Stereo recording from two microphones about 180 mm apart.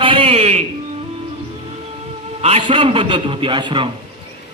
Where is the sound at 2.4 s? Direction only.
30° right (ahead or behind).